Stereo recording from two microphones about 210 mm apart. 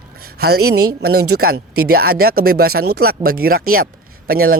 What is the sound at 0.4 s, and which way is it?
A man's voice, 50° right (ahead or behind).